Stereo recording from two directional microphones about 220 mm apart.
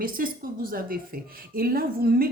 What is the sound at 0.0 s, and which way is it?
A woman's voice, 40° right (ahead or behind).